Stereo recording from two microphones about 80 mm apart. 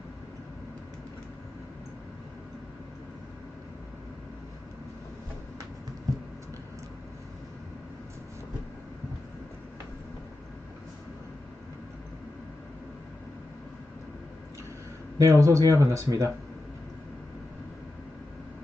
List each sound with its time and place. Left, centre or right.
15.2 s speech: right